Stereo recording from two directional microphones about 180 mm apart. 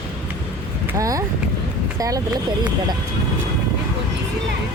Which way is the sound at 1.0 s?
20° right (ahead or behind).